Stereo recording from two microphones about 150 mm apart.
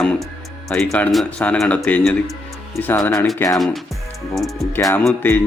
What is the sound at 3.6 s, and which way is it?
Speech, centre (ahead or behind).